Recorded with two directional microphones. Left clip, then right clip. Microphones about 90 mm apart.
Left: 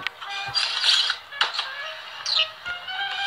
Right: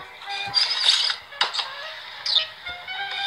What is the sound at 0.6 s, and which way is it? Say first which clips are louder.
Music: even; 30° right (ahead or behind).